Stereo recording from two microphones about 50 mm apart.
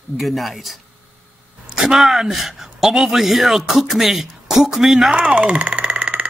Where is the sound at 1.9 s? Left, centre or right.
Centre.